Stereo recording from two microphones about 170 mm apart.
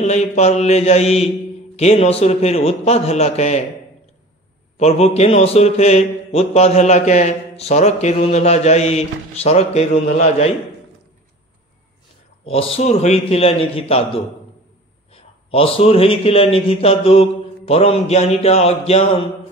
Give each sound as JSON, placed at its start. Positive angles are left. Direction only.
{"t": 0.0, "sound": "a man's voice", "side_deg": 40}
{"t": 4.7, "sound": "a man's voice", "side_deg": 40}
{"t": 12.4, "sound": "a man's voice", "side_deg": 35}